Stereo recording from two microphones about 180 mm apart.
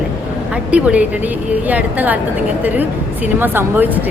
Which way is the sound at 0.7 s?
5° right (ahead or behind).